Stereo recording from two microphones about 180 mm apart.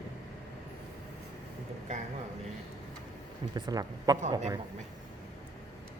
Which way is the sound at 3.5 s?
20° right (ahead or behind).